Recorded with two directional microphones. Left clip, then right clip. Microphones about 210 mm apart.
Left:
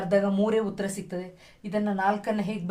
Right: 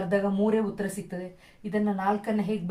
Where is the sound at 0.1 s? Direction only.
45° left (ahead or behind).